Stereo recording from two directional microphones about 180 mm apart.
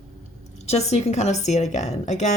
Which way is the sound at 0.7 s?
35° left (ahead or behind).